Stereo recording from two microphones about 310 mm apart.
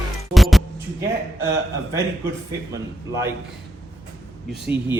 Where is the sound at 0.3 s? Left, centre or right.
Centre.